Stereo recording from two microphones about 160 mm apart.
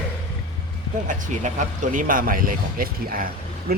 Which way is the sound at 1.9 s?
60° right (ahead or behind).